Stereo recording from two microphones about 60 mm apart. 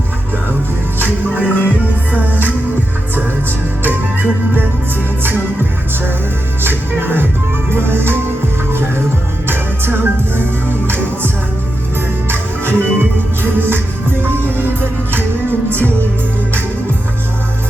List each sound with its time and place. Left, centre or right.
0.9 s music: right
3.8 s music: right
6.6 s music: right
9.5 s music: right
12.3 s music: right